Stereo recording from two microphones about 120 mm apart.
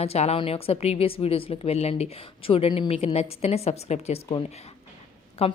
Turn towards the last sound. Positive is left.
turn(degrees=60)  # may be behind; listen again after turning